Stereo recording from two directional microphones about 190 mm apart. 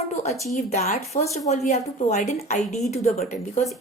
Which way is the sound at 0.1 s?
35° left (ahead or behind).